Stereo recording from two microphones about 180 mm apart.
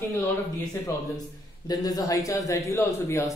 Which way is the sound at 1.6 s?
20° left (ahead or behind).